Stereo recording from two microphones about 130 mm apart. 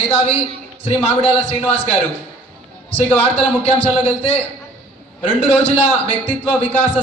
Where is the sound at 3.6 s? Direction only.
45° left (ahead or behind).